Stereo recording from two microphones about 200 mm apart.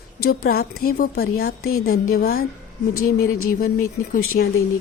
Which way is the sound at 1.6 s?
90° left.